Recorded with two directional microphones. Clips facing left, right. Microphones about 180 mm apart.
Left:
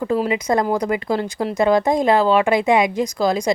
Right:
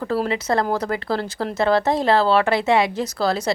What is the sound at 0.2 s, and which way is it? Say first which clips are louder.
Speech: left 2 dB; 10° left (ahead or behind).